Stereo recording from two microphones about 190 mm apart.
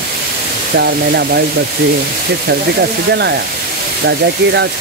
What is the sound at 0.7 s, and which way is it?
Speech, 60° right (ahead or behind).